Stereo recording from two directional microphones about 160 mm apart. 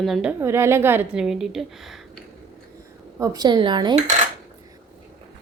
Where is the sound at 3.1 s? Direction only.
20° right (ahead or behind).